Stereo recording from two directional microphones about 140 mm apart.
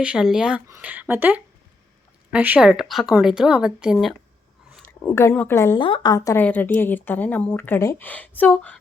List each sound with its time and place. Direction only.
0.0 s a woman's voice: 5° right (ahead or behind)
4.9 s a woman's voice: 15° left (ahead or behind)
5.8 s a woman's voice: 35° left (ahead or behind)
6.4 s a woman's voice: 10° left (ahead or behind)